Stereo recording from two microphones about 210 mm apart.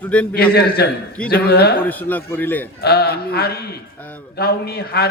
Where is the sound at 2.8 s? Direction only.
50° left (ahead or behind).